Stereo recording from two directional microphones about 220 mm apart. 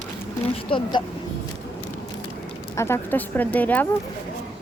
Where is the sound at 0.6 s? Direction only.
25° left (ahead or behind).